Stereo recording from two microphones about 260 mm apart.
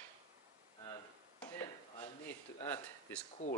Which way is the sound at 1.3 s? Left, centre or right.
Centre.